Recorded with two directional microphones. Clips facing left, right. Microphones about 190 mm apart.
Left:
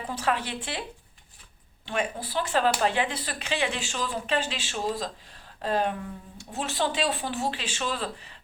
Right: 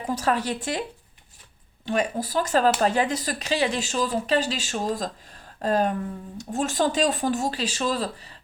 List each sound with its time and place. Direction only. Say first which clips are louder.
0.1 s speech: right 5 dB; 40° right (ahead or behind)
1.8 s speech: right 5 dB; 40° right (ahead or behind)